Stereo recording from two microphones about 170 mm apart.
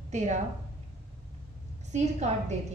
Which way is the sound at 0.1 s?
45° right (ahead or behind).